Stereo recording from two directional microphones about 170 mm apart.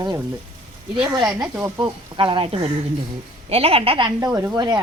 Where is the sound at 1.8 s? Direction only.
30° right (ahead or behind).